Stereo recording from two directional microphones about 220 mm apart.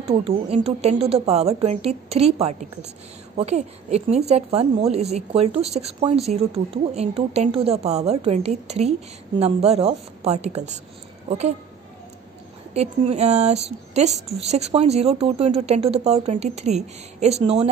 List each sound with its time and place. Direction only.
0.1 s a woman's voice: 25° right (ahead or behind)
12.7 s a woman's voice: 30° right (ahead or behind)